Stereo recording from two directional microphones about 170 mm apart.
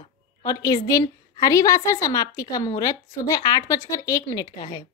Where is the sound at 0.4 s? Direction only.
20° left (ahead or behind).